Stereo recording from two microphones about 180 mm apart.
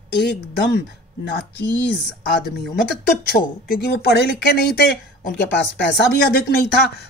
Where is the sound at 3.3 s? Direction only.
65° left (ahead or behind).